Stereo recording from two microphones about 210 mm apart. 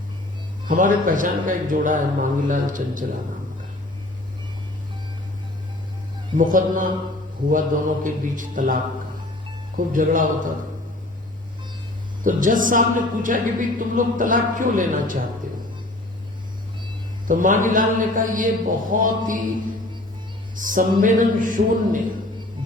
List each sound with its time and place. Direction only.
0.7 s speech: 40° right (ahead or behind)
6.3 s speech: 40° right (ahead or behind)
8.0 s speech: 40° right (ahead or behind)
12.2 s speech: 40° right (ahead or behind)
17.2 s speech: 40° right (ahead or behind)
20.6 s speech: 40° right (ahead or behind)